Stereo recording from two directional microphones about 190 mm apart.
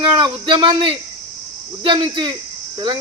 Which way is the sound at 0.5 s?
25° right (ahead or behind).